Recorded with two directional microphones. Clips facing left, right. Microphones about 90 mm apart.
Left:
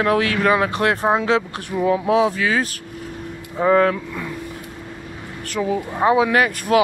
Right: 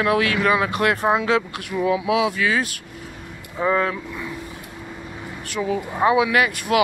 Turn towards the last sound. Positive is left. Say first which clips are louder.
# left 2 dB
turn(degrees=40)  # may be behind; listen again after turning